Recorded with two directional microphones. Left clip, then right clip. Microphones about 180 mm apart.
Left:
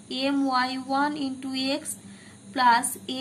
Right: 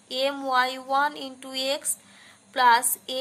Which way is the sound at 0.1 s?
40° right (ahead or behind).